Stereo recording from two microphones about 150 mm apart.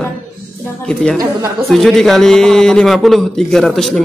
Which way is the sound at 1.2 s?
20° right (ahead or behind).